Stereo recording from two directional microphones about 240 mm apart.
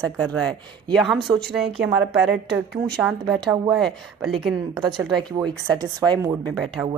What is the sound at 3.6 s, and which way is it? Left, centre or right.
Speech, centre.